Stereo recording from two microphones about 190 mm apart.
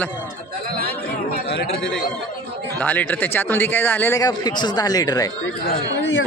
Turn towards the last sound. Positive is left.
turn(degrees=65)  # may be behind; listen again after turning